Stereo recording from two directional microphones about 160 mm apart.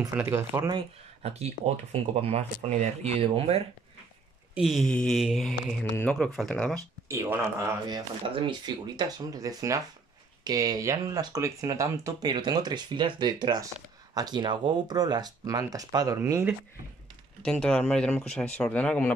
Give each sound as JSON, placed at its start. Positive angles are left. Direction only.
{"t": 0.1, "sound": "speech", "side_deg": -15}
{"t": 0.7, "sound": "speech", "side_deg": -40}
{"t": 4.6, "sound": "speech", "side_deg": 0}
{"t": 7.1, "sound": "speech", "side_deg": -15}
{"t": 17.5, "sound": "speech", "side_deg": 5}